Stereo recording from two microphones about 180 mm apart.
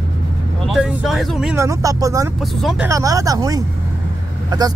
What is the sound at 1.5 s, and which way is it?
Speech, 15° right (ahead or behind).